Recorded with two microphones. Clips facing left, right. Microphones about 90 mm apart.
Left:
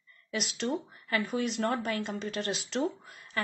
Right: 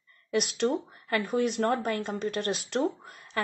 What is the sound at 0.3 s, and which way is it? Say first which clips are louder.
Speech: right 6 dB; 55° right (ahead or behind).